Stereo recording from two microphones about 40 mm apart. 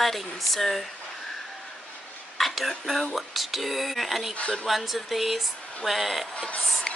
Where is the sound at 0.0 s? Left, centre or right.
Centre.